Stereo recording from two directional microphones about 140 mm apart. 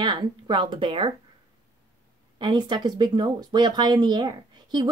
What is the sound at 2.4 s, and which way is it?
Speech, 30° right (ahead or behind).